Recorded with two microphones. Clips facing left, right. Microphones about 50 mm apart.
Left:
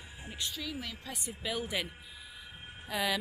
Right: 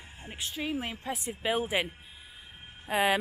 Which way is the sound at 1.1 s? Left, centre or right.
Right.